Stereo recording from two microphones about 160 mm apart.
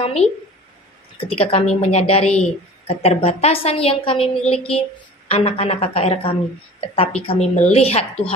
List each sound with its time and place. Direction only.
0.0 s a woman's voice: 40° left (ahead or behind)